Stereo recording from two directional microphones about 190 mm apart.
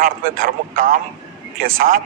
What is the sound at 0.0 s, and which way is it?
A man's voice, 50° right (ahead or behind).